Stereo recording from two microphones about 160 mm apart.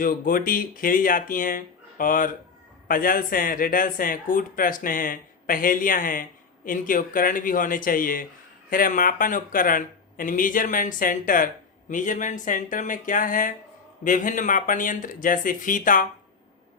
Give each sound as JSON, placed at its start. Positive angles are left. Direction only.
{"t": 0.0, "sound": "speech", "side_deg": 60}